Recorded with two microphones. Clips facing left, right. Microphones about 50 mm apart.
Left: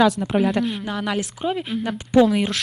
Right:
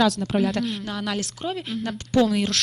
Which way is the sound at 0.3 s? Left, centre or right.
Centre.